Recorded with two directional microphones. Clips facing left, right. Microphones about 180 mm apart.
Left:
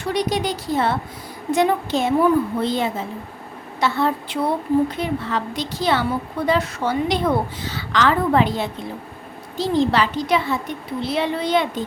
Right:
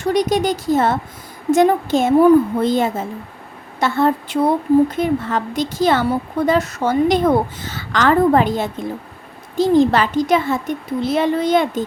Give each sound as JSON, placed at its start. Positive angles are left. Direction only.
{"t": 0.0, "sound": "a woman's voice", "side_deg": -45}